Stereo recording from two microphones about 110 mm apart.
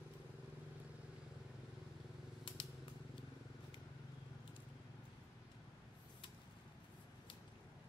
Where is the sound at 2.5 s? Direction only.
50° left (ahead or behind).